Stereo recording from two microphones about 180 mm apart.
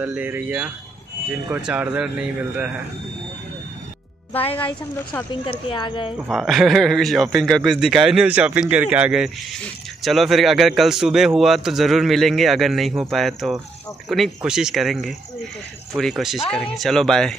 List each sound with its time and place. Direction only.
0.0 s speech: 10° right (ahead or behind)
4.6 s a woman's voice: 15° left (ahead or behind)
5.3 s a woman's voice: 30° left (ahead or behind)
6.1 s a man's voice: centre (ahead or behind)